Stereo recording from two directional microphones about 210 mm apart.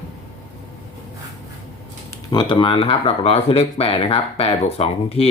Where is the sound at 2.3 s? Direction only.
20° left (ahead or behind).